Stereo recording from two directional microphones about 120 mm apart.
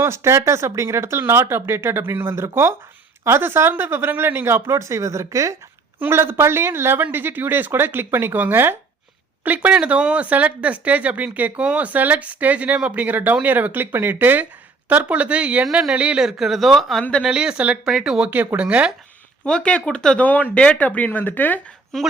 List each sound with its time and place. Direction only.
0.0 s speech: 20° right (ahead or behind); by 17.2 s 10° left (ahead or behind)
17.2 s speech: 5° right (ahead or behind)
19.5 s a woman's voice: 10° left (ahead or behind)